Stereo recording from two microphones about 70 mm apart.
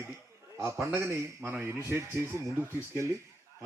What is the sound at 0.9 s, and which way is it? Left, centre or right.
Speech, right.